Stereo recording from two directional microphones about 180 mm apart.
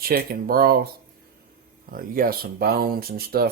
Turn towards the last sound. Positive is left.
turn(degrees=-55)  # may be behind; listen again after turning